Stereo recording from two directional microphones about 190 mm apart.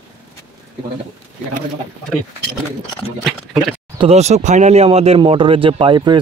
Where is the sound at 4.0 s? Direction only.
35° right (ahead or behind).